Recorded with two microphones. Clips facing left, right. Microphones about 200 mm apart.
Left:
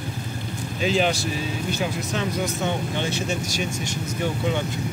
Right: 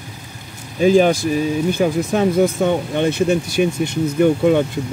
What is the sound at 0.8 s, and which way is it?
Speech, 50° right (ahead or behind).